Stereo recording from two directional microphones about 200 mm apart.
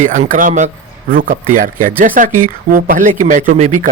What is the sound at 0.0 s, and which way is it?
Speech, 40° right (ahead or behind).